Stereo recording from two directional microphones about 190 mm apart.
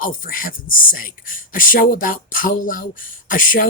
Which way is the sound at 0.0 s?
45° left (ahead or behind).